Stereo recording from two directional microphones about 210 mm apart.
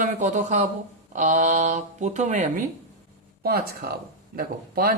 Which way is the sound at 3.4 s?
45° right (ahead or behind).